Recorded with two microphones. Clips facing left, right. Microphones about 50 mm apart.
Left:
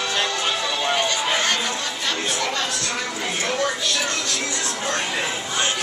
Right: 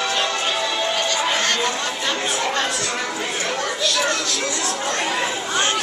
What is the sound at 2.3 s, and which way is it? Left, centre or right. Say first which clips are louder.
Chatter: right 2 dB; right.